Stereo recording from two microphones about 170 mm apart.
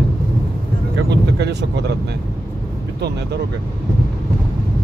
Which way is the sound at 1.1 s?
85° right.